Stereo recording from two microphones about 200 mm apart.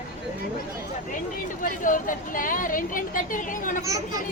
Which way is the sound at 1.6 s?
40° left (ahead or behind).